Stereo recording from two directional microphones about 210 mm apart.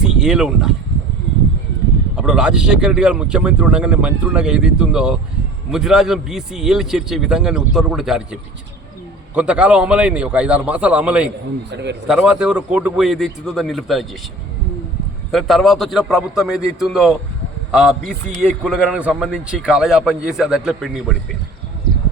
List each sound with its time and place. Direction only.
0.0 s speech: 5° right (ahead or behind)
2.1 s a man's voice: 5° right (ahead or behind)
11.7 s a man's voice: 55° right (ahead or behind)
12.0 s a man's voice: 5° right (ahead or behind)
15.3 s a man's voice: centre (ahead or behind)